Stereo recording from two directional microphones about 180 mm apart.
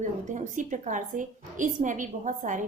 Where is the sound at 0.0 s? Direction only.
45° right (ahead or behind).